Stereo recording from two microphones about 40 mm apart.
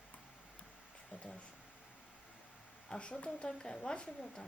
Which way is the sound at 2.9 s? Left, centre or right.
Left.